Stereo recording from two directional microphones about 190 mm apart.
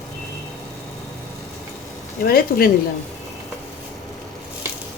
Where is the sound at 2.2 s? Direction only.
50° left (ahead or behind).